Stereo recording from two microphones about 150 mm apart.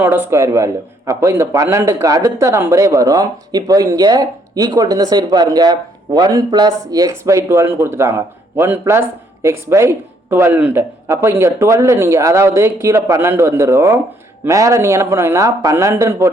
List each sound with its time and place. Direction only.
0.0 s a man's voice: 15° right (ahead or behind)